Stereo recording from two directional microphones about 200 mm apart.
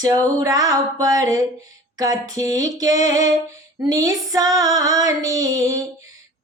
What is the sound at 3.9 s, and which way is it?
Female singing, 20° right (ahead or behind).